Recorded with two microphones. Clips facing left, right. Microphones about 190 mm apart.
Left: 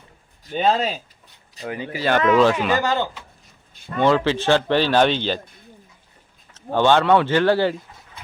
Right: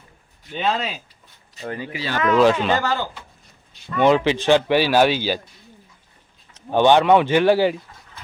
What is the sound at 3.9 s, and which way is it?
Speech, 15° right (ahead or behind).